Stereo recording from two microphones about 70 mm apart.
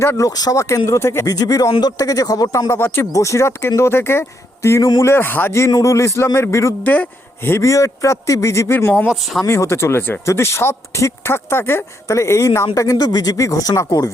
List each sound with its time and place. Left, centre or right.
0.2 s a man's voice: left
1.3 s speech: left
2.7 s speech: left
3.1 s a man's voice: left
5.0 s a man's voice: left
6.8 s speech: left
7.6 s a man's voice: left
9.0 s speech: centre
9.5 s speech: left
12.0 s a man's voice: left
13.1 s speech: left